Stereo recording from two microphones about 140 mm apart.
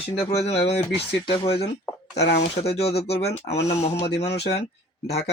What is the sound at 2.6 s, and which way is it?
Speech, 50° left (ahead or behind).